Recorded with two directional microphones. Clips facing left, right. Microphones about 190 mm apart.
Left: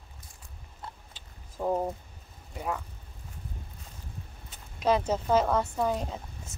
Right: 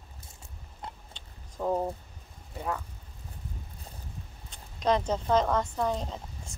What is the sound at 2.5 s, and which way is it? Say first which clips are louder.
Speech: even; 15° left (ahead or behind).